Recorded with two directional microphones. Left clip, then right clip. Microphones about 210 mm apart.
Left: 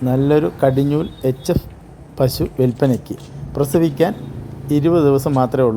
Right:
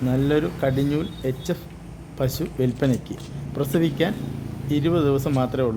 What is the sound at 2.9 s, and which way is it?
Speech, centre (ahead or behind).